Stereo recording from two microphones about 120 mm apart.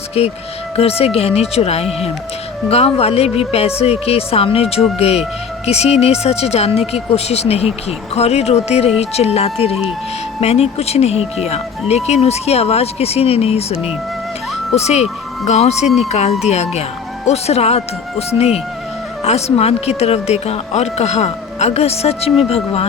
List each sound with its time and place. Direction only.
0.2 s speech: 55° left (ahead or behind)
14.8 s speech: 65° left (ahead or behind)